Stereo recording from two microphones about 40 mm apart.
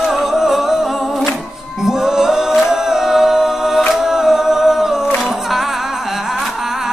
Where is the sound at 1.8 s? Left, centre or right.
Centre.